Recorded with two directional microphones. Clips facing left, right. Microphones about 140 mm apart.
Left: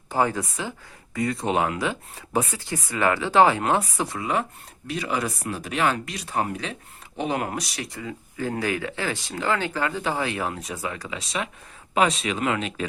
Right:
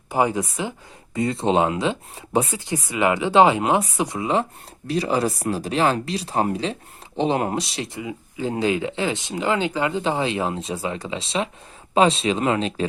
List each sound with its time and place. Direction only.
0.1 s speech: 15° right (ahead or behind)